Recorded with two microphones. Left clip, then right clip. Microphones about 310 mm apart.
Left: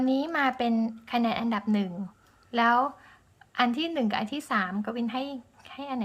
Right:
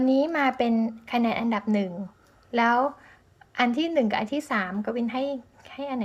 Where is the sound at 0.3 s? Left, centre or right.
Centre.